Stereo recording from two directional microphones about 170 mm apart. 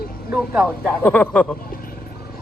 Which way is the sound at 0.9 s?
10° left (ahead or behind).